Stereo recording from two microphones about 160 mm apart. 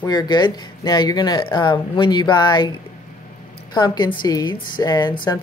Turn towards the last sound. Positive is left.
turn(degrees=25)  # may be behind; listen again after turning